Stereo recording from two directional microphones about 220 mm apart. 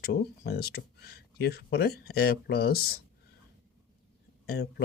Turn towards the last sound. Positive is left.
turn(degrees=45)  # may be behind; listen again after turning